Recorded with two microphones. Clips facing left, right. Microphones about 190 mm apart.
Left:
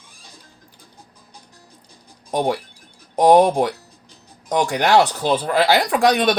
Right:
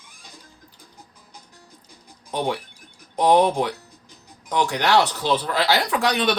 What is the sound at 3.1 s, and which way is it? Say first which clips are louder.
Speech: left 4 dB; 45° left (ahead or behind).